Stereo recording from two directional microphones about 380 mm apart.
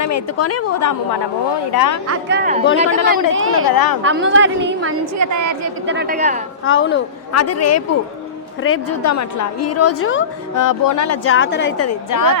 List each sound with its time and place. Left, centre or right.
0.0 s a woman's voice: left
1.7 s a woman's voice: left
2.3 s a woman's voice: right
3.3 s speech: right
3.7 s speech: left
4.0 s a woman's voice: right
5.1 s a woman's voice: right
5.8 s a woman's voice: right
6.7 s a woman's voice: left
10.5 s speech: left
12.1 s speech: left